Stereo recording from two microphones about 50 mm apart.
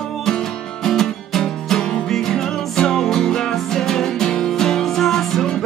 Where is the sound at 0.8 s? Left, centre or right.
Centre.